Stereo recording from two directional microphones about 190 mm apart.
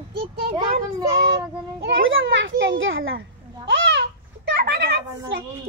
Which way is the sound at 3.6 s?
70° right (ahead or behind).